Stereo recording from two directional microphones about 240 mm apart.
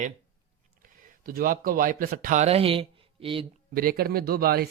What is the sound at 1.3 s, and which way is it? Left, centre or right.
Speech, right.